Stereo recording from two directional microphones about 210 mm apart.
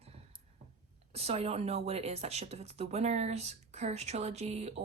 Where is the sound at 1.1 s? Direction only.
30° right (ahead or behind).